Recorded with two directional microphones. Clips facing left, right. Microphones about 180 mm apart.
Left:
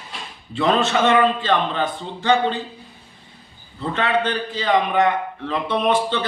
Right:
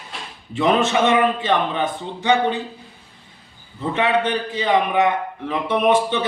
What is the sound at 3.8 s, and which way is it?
A man's voice, 15° right (ahead or behind).